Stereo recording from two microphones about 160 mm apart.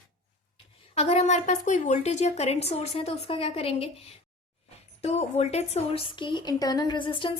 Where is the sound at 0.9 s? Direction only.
40° left (ahead or behind).